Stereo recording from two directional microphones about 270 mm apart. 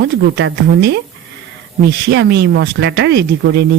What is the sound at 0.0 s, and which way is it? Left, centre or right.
Speech, right.